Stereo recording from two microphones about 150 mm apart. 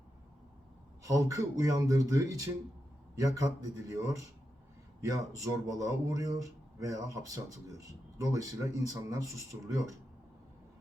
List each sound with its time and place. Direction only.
1.0 s speech: 20° right (ahead or behind)